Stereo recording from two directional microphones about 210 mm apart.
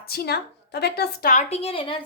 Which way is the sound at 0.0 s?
50° left (ahead or behind).